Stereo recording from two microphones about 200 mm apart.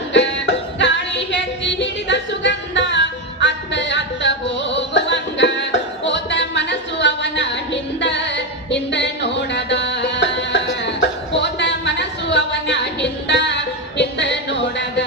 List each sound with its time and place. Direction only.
0.1 s music: 65° left (ahead or behind)